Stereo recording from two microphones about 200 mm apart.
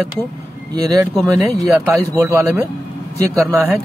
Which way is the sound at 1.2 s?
15° right (ahead or behind).